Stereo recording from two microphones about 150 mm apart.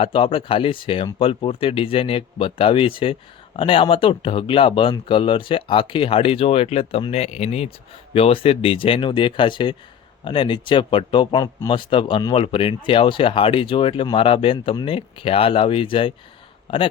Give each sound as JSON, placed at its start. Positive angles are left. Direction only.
{"t": 0.0, "sound": "speech", "side_deg": 40}